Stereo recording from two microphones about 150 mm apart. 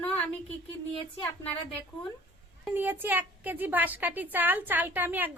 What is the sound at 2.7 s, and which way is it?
A woman's voice, 15° right (ahead or behind).